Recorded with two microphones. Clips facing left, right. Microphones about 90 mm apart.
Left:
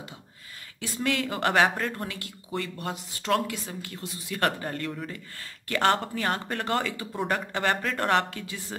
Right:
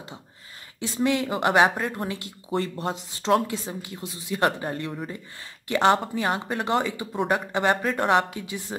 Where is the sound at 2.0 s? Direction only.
25° right (ahead or behind).